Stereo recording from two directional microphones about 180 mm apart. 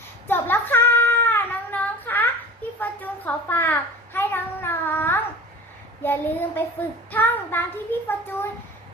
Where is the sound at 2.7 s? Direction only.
10° left (ahead or behind).